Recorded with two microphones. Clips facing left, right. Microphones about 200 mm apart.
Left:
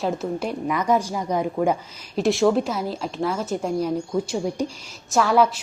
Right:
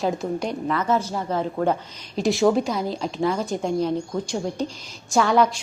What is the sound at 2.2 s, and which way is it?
A woman's voice, centre (ahead or behind).